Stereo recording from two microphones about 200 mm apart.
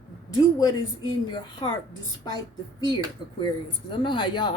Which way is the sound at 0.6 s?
20° left (ahead or behind).